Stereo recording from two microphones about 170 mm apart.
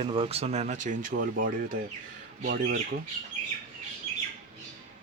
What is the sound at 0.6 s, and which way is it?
Speech, 50° right (ahead or behind).